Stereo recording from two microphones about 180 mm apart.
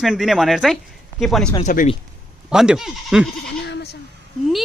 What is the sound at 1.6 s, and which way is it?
Speech, 40° left (ahead or behind).